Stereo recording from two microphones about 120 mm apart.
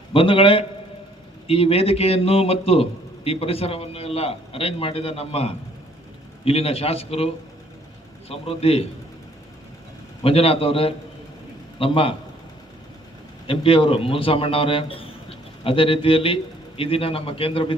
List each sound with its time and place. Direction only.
0.1 s a man's voice: 50° left (ahead or behind)
8.3 s a man's voice: 55° left (ahead or behind)
10.2 s a man's voice: 55° left (ahead or behind)
13.5 s a man's voice: 50° left (ahead or behind)